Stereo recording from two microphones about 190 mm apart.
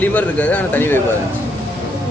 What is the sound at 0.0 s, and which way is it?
Speech, 10° left (ahead or behind).